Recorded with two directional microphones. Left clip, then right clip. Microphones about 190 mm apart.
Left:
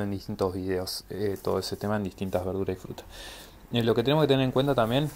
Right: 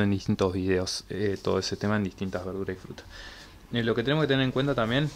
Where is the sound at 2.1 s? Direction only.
5° left (ahead or behind).